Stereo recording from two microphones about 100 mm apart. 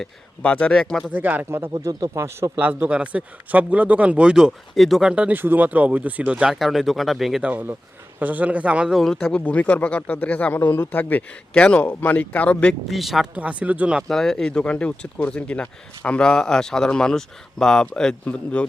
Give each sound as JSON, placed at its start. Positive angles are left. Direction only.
{"t": 0.4, "sound": "speech", "side_deg": 15}
{"t": 1.1, "sound": "a man's voice", "side_deg": -15}
{"t": 1.7, "sound": "speech", "side_deg": -40}
{"t": 2.6, "sound": "a man's voice", "side_deg": -20}
{"t": 7.5, "sound": "speech", "side_deg": -20}
{"t": 12.9, "sound": "speech", "side_deg": 0}
{"t": 13.3, "sound": "a man's voice", "side_deg": -15}
{"t": 14.1, "sound": "speech", "side_deg": 5}